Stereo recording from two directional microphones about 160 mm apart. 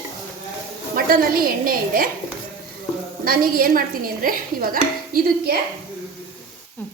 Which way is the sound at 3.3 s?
65° right (ahead or behind).